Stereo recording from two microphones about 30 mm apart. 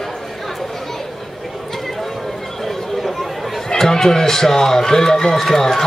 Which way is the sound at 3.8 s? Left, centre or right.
Centre.